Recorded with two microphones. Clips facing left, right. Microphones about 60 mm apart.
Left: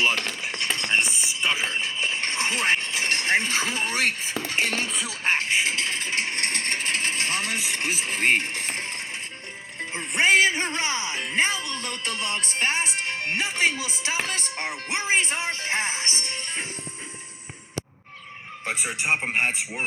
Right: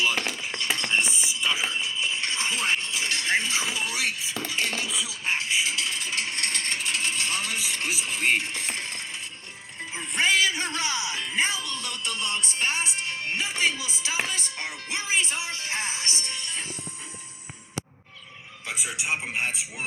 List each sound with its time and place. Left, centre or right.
0.4 s a sound: left
10.2 s music: left
13.6 s speech: left
18.6 s a man's voice: left